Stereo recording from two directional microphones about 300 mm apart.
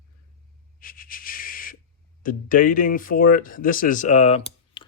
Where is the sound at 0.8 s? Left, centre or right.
Left.